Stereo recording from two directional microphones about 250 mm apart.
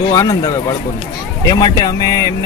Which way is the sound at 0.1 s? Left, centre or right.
Centre.